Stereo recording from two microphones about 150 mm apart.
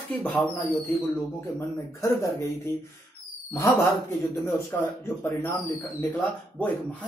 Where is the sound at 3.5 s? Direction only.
20° left (ahead or behind).